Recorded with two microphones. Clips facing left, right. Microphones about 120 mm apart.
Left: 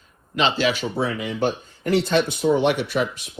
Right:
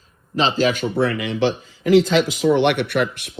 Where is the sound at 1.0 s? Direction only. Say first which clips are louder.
Right 4 dB; 75° right (ahead or behind).